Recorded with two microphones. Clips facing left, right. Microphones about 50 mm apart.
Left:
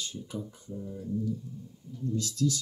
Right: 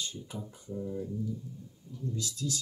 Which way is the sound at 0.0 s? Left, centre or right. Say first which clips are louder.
Left 2 dB; right.